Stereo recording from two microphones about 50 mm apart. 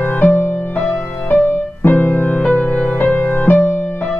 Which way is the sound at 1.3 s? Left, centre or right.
Left.